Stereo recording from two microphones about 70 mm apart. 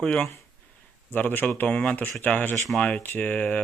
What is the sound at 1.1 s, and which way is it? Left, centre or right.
Speech, left.